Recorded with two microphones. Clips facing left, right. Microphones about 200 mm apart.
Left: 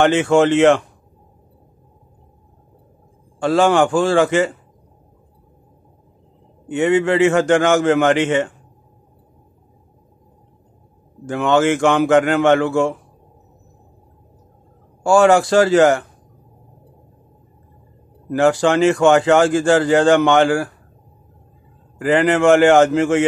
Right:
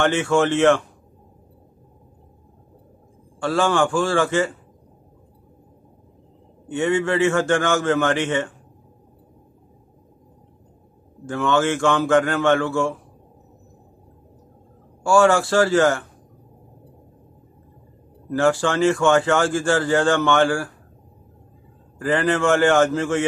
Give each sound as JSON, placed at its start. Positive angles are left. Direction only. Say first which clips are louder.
{"t": 0.1, "sound": "a man's voice", "louder": "left 5 dB", "side_deg": 20}
{"t": 3.3, "sound": "a man's voice", "louder": "left 5 dB", "side_deg": 20}
{"t": 6.7, "sound": "a man's voice", "louder": "left 5 dB", "side_deg": 20}
{"t": 11.2, "sound": "a man's voice", "louder": "left 4 dB", "side_deg": 20}
{"t": 15.0, "sound": "a man's voice", "louder": "left 4 dB", "side_deg": 20}
{"t": 18.3, "sound": "speech", "louder": "left 4 dB", "side_deg": 20}
{"t": 22.0, "sound": "speech", "louder": "left 6 dB", "side_deg": 15}